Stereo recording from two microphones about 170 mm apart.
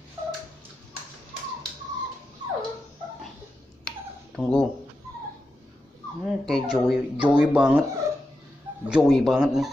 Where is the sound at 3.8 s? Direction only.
5° left (ahead or behind).